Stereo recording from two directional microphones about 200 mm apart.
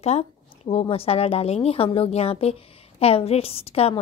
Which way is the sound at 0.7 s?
30° left (ahead or behind).